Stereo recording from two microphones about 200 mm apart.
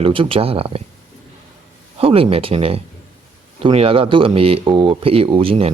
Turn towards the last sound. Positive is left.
turn(degrees=-30)  # may be behind; listen again after turning